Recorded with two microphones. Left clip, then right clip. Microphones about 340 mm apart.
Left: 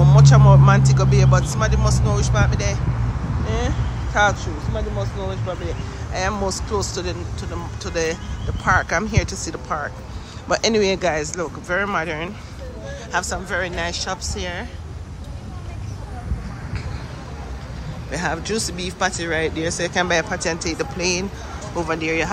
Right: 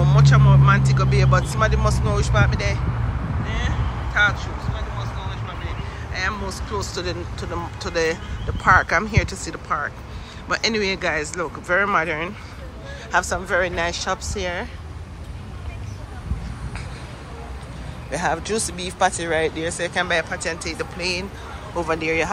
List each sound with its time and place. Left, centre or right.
0.0 s speech: centre
18.1 s speech: centre